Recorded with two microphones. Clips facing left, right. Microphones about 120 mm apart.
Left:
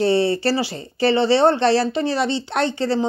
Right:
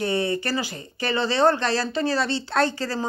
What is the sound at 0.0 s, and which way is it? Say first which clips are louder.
Speech: left 7 dB; 30° left (ahead or behind).